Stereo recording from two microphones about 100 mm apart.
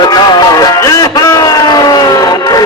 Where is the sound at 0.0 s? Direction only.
40° left (ahead or behind).